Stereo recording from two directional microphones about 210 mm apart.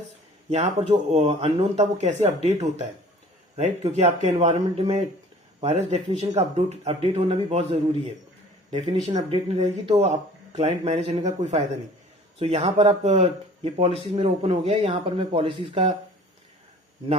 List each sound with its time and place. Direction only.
0.5 s speech: 30° right (ahead or behind)
9.1 s speech: 30° right (ahead or behind)